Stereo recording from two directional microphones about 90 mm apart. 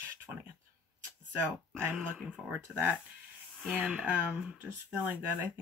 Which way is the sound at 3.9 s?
15° right (ahead or behind).